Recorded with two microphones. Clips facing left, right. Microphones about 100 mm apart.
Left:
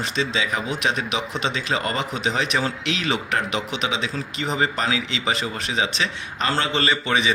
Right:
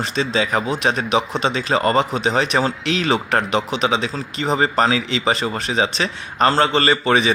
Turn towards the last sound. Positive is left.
turn(degrees=-40)  # may be behind; listen again after turning